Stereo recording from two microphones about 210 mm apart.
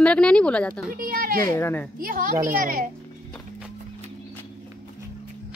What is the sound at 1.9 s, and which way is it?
Speech, 45° right (ahead or behind).